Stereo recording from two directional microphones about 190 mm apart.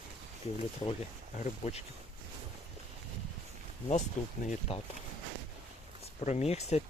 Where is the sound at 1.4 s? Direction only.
35° left (ahead or behind).